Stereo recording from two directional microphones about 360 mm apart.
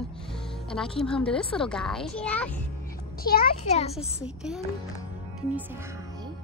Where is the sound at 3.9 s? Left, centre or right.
Centre.